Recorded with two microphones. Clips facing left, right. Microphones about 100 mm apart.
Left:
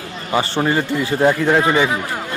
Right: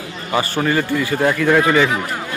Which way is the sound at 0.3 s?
25° left (ahead or behind).